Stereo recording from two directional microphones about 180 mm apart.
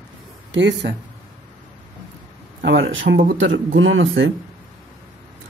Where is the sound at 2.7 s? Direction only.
85° right.